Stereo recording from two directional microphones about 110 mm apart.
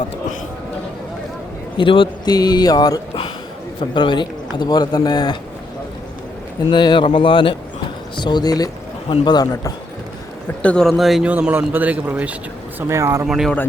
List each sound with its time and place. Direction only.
1.8 s a man's voice: 50° left (ahead or behind)
6.7 s a man's voice: 45° left (ahead or behind)
10.6 s speech: 10° left (ahead or behind)
11.3 s a man's voice: 15° right (ahead or behind)
12.9 s speech: 30° right (ahead or behind)
13.2 s speech: 5° right (ahead or behind)